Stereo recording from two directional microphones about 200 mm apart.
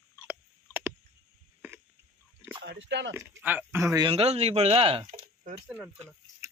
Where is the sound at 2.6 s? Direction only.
60° right (ahead or behind).